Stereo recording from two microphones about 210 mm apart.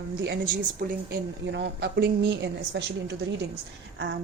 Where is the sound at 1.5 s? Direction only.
55° right (ahead or behind).